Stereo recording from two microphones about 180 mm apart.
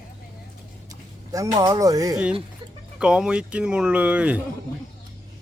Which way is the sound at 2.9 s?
5° right (ahead or behind).